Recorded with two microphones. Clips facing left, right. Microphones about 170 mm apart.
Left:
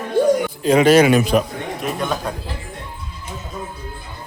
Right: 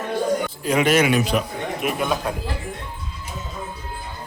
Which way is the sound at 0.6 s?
30° left (ahead or behind).